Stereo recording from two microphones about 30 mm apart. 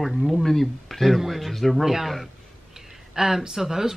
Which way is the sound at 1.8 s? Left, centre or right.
Centre.